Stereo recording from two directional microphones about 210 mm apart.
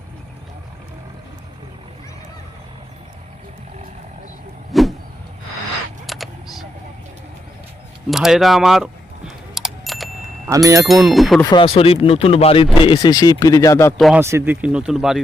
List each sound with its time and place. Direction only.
4.7 s a sound: centre (ahead or behind)
6.1 s a sound: centre (ahead or behind)
8.1 s keys jangling: centre (ahead or behind)
10.5 s speech: 15° right (ahead or behind)
11.0 s speech: centre (ahead or behind)
11.4 s speech: 25° left (ahead or behind)
13.9 s speech: centre (ahead or behind)
14.2 s speech: 10° right (ahead or behind)